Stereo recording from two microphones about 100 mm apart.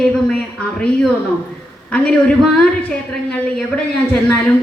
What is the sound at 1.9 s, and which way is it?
A woman's voice, 10° left (ahead or behind).